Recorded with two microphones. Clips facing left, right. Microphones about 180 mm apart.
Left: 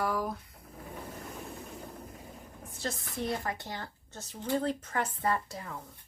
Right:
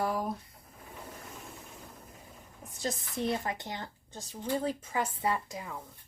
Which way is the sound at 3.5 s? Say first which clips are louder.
Even; 20° right (ahead or behind).